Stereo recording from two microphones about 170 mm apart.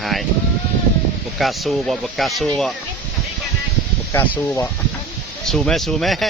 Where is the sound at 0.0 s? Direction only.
Centre (ahead or behind).